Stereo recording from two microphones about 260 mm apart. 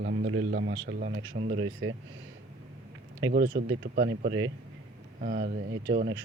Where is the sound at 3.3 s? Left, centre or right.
Right.